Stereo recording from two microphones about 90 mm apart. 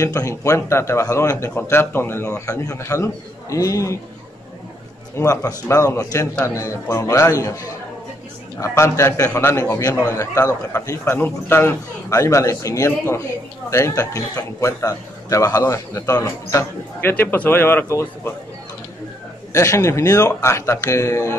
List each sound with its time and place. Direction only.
0.0 s a man's voice: 40° left (ahead or behind)
5.1 s a man's voice: 35° left (ahead or behind)
8.5 s a man's voice: 30° left (ahead or behind)
11.1 s a man's voice: 25° left (ahead or behind)
17.1 s speech: 20° left (ahead or behind)
19.5 s a man's voice: 35° left (ahead or behind)